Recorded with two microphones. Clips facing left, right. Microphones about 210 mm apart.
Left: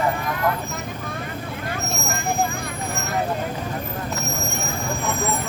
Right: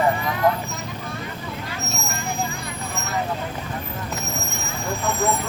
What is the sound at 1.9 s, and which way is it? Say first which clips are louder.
Vehicle: left 4 dB; 50° left (ahead or behind).